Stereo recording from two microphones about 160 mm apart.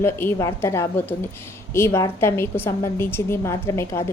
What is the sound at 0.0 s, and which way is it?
A woman's voice, 15° left (ahead or behind).